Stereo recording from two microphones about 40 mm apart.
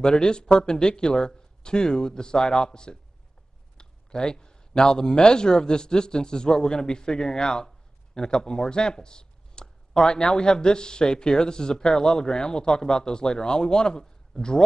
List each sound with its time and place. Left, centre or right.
0.0 s speech: centre